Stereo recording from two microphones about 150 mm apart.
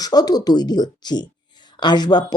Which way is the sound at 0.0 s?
25° left (ahead or behind).